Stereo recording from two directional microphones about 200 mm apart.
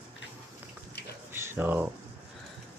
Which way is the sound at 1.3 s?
10° right (ahead or behind).